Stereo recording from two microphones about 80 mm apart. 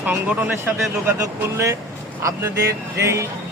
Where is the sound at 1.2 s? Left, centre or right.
Right.